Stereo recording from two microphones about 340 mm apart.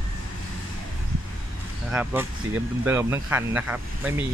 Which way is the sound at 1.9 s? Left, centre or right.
Centre.